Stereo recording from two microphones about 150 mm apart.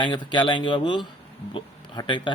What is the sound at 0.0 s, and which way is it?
A man's voice, 30° left (ahead or behind).